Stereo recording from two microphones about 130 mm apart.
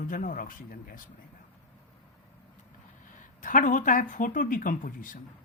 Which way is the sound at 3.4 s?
90° left.